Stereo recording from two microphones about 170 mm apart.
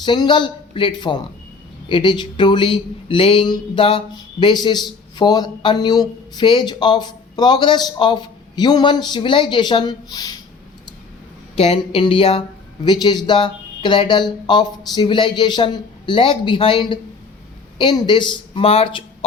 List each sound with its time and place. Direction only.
0.0 s speech: 25° left (ahead or behind)
11.5 s speech: 35° left (ahead or behind)